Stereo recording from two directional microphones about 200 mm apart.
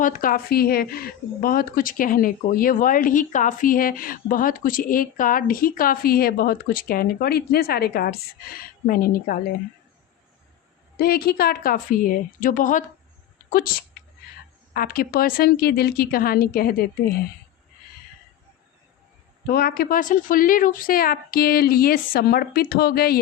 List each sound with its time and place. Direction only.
0.0 s speech: 45° left (ahead or behind)
10.9 s speech: 50° left (ahead or behind)
19.5 s speech: 50° left (ahead or behind)